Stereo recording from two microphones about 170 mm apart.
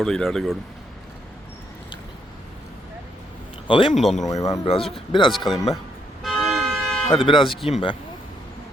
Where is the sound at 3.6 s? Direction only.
30° left (ahead or behind).